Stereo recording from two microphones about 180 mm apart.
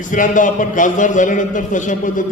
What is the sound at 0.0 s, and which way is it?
A man's voice, 45° left (ahead or behind).